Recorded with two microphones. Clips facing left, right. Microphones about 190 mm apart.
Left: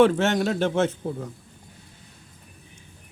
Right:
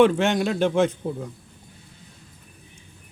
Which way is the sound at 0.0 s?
15° right (ahead or behind).